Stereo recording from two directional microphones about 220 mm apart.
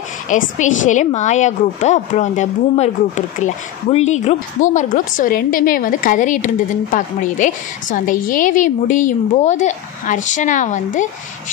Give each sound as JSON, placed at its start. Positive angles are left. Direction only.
{"t": 0.3, "sound": "a woman's voice", "side_deg": 35}